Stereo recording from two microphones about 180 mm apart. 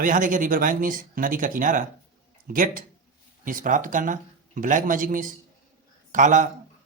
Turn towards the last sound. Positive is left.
turn(degrees=-45)  # may be behind; listen again after turning